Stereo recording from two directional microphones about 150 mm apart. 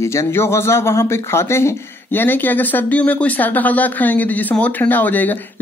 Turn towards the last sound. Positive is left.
turn(degrees=10)  # may be behind; listen again after turning